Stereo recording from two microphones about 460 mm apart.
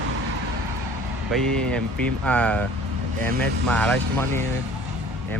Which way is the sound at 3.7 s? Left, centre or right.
Centre.